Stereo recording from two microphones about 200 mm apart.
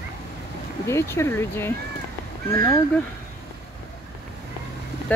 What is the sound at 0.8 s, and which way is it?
Speech, 15° left (ahead or behind).